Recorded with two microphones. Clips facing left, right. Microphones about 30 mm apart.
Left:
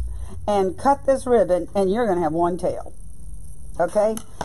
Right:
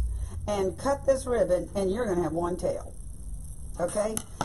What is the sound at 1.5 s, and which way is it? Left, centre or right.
A woman's voice, left.